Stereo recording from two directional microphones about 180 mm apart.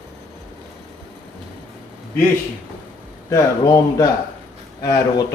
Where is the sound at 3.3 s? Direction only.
15° left (ahead or behind).